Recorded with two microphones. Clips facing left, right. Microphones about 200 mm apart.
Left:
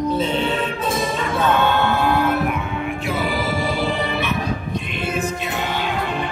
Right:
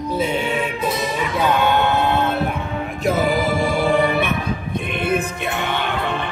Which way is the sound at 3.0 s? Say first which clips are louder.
Right 7 dB; 45° right (ahead or behind).